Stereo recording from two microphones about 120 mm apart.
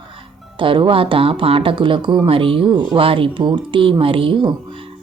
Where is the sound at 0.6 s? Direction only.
45° right (ahead or behind).